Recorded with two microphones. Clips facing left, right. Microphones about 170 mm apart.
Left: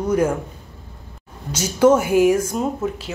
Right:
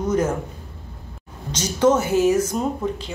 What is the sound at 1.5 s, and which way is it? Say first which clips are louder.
A woman's voice: left 3 dB; 10° left (ahead or behind).